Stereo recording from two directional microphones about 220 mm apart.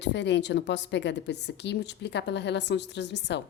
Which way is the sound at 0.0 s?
55° left (ahead or behind).